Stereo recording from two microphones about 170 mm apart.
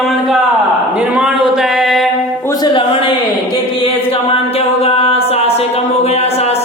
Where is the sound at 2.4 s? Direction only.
20° left (ahead or behind).